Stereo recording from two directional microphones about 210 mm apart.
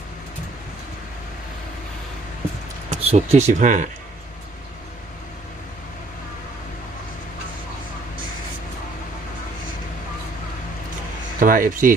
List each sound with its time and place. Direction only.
2.9 s speech: 30° right (ahead or behind)
11.3 s speech: 40° right (ahead or behind)